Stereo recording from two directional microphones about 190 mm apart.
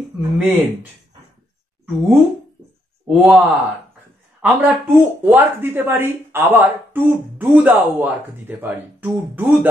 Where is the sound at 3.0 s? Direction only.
Centre (ahead or behind).